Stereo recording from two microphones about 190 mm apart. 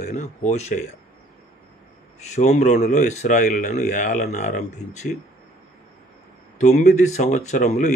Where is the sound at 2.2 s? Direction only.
35° left (ahead or behind).